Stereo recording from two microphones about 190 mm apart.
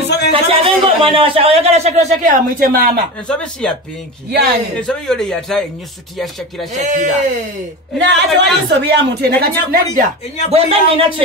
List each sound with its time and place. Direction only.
0.3 s a man's voice: 30° right (ahead or behind); by 3.0 s 50° right (ahead or behind)
3.3 s a man's voice: 5° left (ahead or behind)
4.3 s speech: 60° right (ahead or behind)
4.8 s a man's voice: centre (ahead or behind)
6.8 s a man's voice: 40° right (ahead or behind)
8.0 s speech: 65° right (ahead or behind)
10.5 s speech: 30° right (ahead or behind)